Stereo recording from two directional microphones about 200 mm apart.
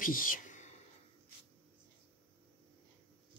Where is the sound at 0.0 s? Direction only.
45° left (ahead or behind).